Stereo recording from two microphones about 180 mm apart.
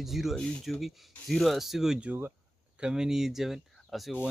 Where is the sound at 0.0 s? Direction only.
Centre (ahead or behind).